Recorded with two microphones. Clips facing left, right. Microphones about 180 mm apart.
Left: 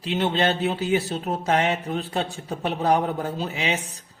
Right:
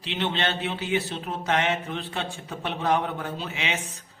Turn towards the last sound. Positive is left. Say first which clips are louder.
# left 4 dB
turn(degrees=35)  # may be behind; listen again after turning